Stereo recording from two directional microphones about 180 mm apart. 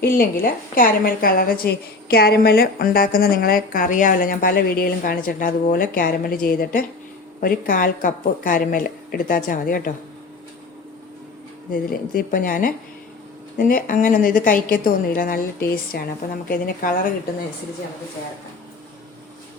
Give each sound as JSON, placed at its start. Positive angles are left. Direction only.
{"t": 0.2, "sound": "a woman's voice", "side_deg": 55}
{"t": 11.7, "sound": "a woman's voice", "side_deg": 50}